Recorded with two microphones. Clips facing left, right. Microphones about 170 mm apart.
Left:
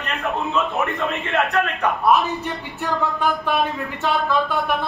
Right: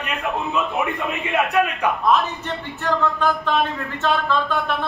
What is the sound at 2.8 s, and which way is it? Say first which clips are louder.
A man's voice: right 1 dB; 10° left (ahead or behind).